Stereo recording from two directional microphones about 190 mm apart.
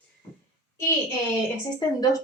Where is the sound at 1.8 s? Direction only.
20° left (ahead or behind).